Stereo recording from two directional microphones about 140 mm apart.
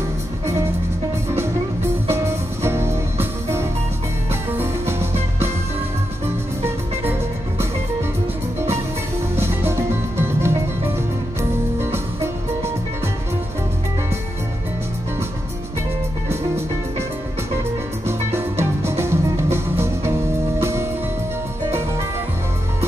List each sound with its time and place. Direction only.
1.3 s music: 15° right (ahead or behind)
6.6 s music: 15° right (ahead or behind)
9.4 s music: 15° right (ahead or behind)
11.8 s music: 15° right (ahead or behind)
18.0 s music: 20° right (ahead or behind)